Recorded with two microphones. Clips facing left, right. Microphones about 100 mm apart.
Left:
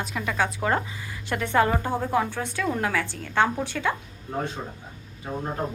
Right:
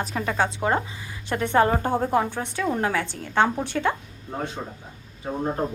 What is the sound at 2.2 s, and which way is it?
A woman's voice, 20° right (ahead or behind).